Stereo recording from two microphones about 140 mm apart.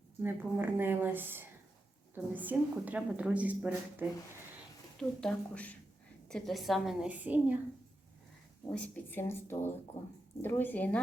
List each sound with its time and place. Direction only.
0.2 s a woman's voice: 15° right (ahead or behind)
4.9 s a woman's voice: 10° left (ahead or behind); by 7.5 s 10° right (ahead or behind)
8.7 s speech: 10° left (ahead or behind)